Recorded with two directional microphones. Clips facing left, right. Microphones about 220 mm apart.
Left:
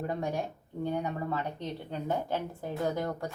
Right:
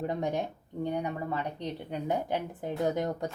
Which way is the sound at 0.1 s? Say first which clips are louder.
Right 2 dB; 20° right (ahead or behind).